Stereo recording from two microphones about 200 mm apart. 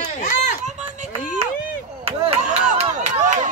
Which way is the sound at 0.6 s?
35° right (ahead or behind).